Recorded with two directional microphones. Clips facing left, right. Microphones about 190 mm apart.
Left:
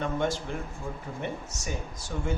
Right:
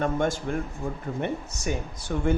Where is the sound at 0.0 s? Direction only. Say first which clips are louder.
Right 3 dB; 50° right (ahead or behind).